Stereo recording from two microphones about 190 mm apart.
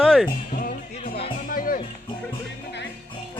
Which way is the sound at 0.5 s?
45° left (ahead or behind).